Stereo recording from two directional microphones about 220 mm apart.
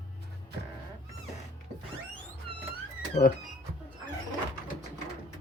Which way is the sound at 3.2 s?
30° left (ahead or behind).